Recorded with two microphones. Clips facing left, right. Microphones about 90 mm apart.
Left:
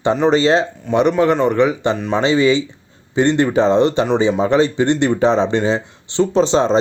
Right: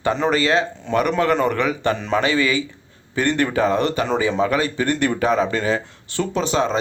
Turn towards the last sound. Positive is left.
turn(degrees=30)  # may be behind; listen again after turning